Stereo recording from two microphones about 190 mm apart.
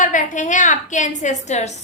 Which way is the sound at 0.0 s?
40° left (ahead or behind).